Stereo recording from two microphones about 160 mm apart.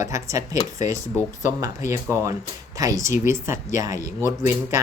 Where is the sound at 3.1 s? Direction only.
50° left (ahead or behind).